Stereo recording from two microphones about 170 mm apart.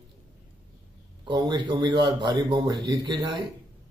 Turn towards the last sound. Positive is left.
turn(degrees=-25)  # may be behind; listen again after turning